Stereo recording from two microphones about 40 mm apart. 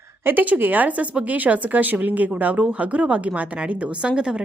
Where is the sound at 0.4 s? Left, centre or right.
Right.